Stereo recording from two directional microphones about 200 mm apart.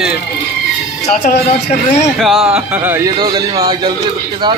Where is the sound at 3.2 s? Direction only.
20° right (ahead or behind).